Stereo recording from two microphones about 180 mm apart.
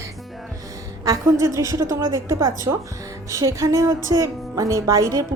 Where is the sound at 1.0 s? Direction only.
20° right (ahead or behind).